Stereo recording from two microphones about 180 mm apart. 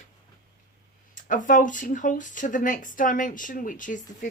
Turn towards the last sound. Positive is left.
turn(degrees=45)  # may be behind; listen again after turning